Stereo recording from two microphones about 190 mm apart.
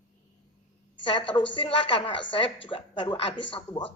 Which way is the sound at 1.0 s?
25° left (ahead or behind).